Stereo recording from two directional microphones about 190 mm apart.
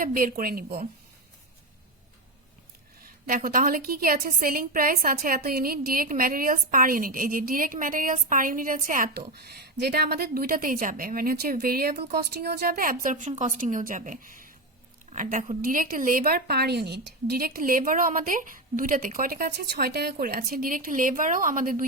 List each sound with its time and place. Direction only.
0.0 s a woman's voice: 45° right (ahead or behind)
3.2 s a woman's voice: 45° right (ahead or behind)